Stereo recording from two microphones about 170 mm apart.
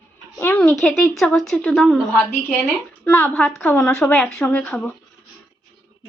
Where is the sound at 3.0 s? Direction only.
10° left (ahead or behind).